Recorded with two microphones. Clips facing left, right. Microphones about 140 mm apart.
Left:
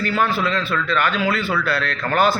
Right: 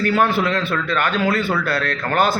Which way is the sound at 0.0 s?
55° right (ahead or behind).